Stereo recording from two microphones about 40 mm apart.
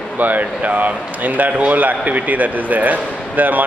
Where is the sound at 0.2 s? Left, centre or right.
Right.